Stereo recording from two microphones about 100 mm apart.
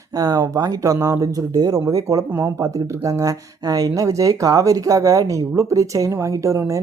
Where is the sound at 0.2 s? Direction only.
35° right (ahead or behind).